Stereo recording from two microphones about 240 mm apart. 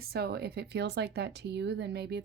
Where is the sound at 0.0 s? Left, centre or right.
Right.